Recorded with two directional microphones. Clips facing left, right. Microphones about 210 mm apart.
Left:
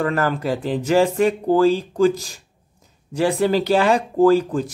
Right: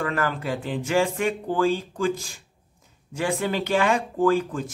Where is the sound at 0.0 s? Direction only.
40° left (ahead or behind).